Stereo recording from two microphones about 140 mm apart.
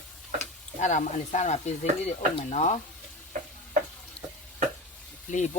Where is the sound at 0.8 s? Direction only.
60° left (ahead or behind).